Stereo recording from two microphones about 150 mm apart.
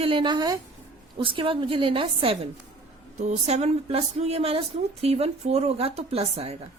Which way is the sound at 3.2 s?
50° right (ahead or behind).